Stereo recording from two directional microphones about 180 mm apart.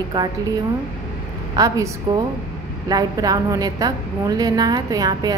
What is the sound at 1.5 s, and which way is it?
Speech, 20° right (ahead or behind).